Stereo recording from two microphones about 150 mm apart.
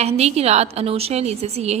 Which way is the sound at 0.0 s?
45° right (ahead or behind).